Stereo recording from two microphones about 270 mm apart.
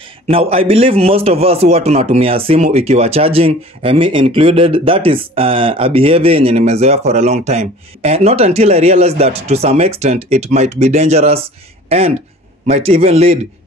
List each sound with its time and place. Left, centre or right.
0.3 s a man's voice: right